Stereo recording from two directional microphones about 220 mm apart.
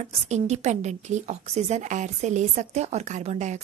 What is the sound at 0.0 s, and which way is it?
A woman's voice, 30° right (ahead or behind).